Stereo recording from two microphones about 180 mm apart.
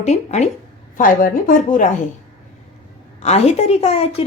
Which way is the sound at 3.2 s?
35° left (ahead or behind).